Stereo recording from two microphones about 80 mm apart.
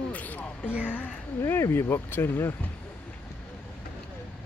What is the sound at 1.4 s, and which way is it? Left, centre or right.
Speech, left.